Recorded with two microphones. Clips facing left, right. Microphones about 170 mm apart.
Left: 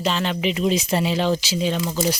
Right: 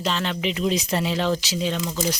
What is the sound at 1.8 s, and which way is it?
Speech, 25° left (ahead or behind).